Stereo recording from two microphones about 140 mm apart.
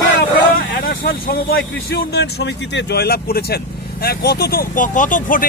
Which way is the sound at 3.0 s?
90° left.